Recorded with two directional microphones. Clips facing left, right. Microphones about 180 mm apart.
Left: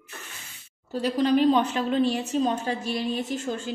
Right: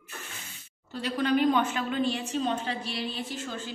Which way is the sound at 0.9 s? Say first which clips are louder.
Left 4 dB; 40° left (ahead or behind).